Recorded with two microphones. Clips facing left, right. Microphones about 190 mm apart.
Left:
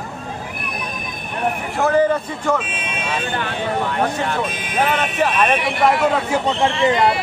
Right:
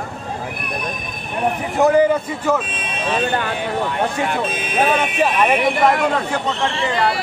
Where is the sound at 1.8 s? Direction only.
15° right (ahead or behind).